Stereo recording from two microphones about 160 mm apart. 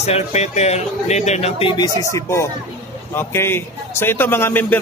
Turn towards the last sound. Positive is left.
turn(degrees=10)  # may be behind; listen again after turning